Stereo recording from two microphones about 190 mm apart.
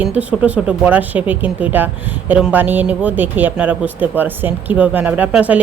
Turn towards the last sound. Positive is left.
turn(degrees=-5)  # may be behind; listen again after turning